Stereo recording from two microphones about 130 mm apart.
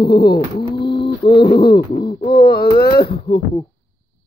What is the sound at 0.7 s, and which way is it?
Bird, 35° left (ahead or behind).